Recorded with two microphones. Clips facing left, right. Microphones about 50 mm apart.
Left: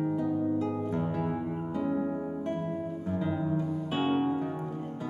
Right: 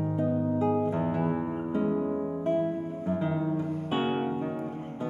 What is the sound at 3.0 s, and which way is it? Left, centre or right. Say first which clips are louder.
Music: right 3 dB; right.